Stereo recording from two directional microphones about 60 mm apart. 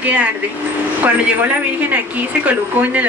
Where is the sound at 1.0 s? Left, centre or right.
Right.